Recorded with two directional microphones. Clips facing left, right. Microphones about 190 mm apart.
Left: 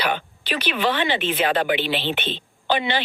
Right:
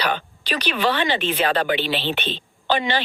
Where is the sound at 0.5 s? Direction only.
40° right (ahead or behind).